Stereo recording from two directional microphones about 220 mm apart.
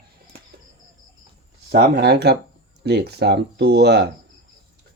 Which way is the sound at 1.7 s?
50° right (ahead or behind).